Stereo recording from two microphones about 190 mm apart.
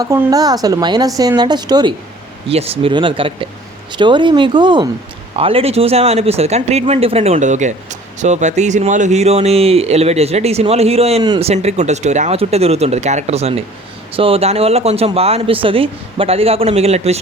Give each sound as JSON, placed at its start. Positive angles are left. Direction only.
{"t": 0.0, "sound": "speech", "side_deg": -15}
{"t": 11.2, "sound": "speech", "side_deg": -20}
{"t": 11.4, "sound": "speech", "side_deg": -35}